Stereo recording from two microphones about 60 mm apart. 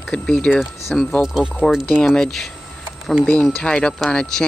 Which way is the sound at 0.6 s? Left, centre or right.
Centre.